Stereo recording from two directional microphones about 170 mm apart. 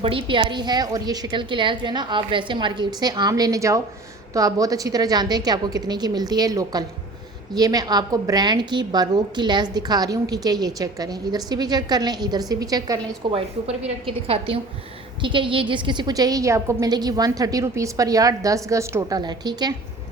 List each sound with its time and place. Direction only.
0.0 s a woman's voice: 30° right (ahead or behind)
14.1 s a woman's voice: 35° right (ahead or behind)